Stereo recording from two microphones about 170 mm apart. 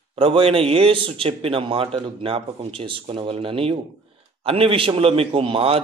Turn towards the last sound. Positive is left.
turn(degrees=-35)  # may be behind; listen again after turning